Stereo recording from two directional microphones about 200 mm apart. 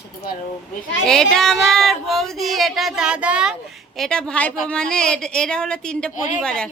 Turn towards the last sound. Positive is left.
turn(degrees=5)  # may be behind; listen again after turning